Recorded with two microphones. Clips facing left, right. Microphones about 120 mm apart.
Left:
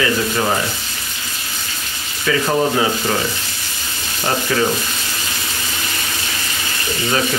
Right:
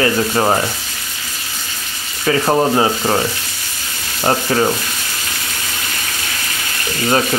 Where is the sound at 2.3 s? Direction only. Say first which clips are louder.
Right 3 dB; 30° right (ahead or behind).